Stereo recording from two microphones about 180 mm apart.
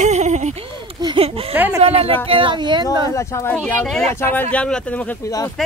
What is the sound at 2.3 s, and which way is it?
Speech, 30° right (ahead or behind).